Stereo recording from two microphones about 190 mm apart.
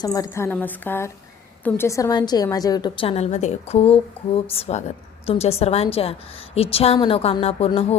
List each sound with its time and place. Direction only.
0.0 s a woman's voice: 20° left (ahead or behind)